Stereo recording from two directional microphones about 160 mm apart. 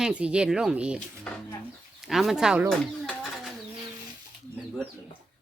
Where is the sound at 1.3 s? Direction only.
5° left (ahead or behind).